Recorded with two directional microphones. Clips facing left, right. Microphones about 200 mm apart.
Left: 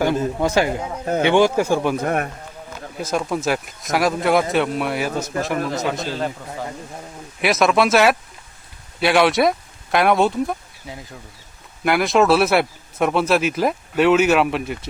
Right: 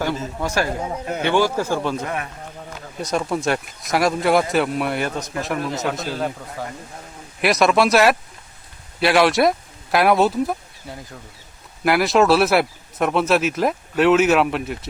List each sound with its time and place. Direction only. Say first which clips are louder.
0.3 s a man's voice: left 4 dB; 20° left (ahead or behind)
2.0 s a man's voice: left 6 dB; 50° left (ahead or behind)
3.0 s a man's voice: even; centre (ahead or behind)
7.4 s a man's voice: even; centre (ahead or behind)